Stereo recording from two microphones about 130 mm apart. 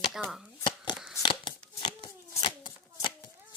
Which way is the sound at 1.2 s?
35° left (ahead or behind).